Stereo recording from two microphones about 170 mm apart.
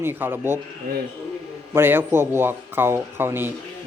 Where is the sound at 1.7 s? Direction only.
15° right (ahead or behind).